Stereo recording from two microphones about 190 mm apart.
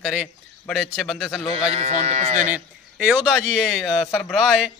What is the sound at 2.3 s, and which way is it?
A man's voice, 10° right (ahead or behind).